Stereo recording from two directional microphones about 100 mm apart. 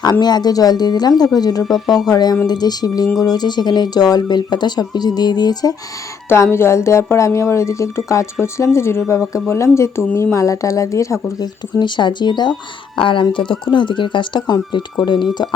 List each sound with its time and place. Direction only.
0.0 s speech: 45° left (ahead or behind)
6.2 s speech: 25° left (ahead or behind)
11.8 s speech: 50° left (ahead or behind)